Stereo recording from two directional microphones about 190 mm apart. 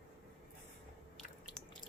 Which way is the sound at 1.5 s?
5° left (ahead or behind).